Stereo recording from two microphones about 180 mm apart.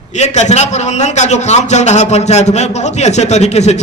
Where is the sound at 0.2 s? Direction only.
40° left (ahead or behind).